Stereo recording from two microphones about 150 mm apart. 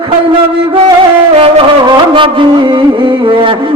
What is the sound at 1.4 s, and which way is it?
Music, 35° right (ahead or behind).